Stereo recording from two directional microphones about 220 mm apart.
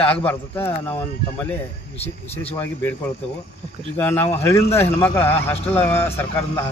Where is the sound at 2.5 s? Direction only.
10° left (ahead or behind).